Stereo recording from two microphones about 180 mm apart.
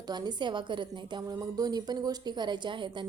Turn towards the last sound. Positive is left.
turn(degrees=-25)  # may be behind; listen again after turning